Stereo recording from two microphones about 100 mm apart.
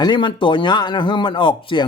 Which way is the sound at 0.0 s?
50° left (ahead or behind).